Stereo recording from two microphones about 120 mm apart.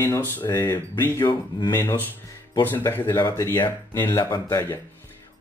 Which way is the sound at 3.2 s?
30° left (ahead or behind).